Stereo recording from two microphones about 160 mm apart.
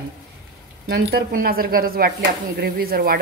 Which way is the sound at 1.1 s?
70° right (ahead or behind).